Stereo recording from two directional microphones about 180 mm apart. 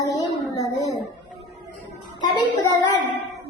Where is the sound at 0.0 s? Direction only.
20° left (ahead or behind).